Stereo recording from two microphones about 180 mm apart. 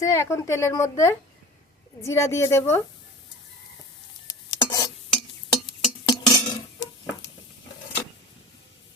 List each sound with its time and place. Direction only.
0.0 s a woman's voice: 15° left (ahead or behind)
4.3 s stir: 20° left (ahead or behind)
6.1 s dishes: 25° left (ahead or behind)